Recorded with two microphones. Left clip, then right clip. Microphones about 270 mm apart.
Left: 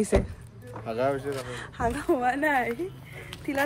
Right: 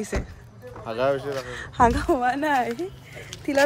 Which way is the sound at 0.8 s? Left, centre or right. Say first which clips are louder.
Right 3 dB; centre.